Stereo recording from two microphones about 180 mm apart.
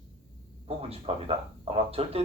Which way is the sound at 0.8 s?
30° right (ahead or behind).